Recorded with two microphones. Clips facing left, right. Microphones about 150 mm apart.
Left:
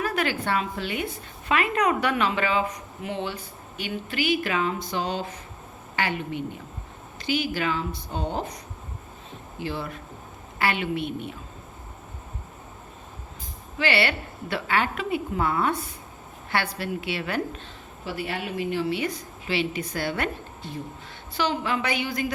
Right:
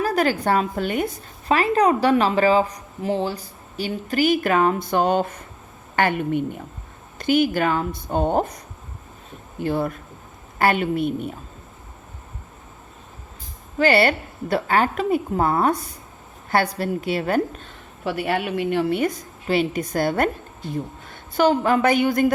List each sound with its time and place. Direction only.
0.0 s a woman's voice: 40° right (ahead or behind)
9.6 s a woman's voice: 50° right (ahead or behind)
13.7 s a woman's voice: 45° right (ahead or behind)
18.0 s a woman's voice: 65° right (ahead or behind)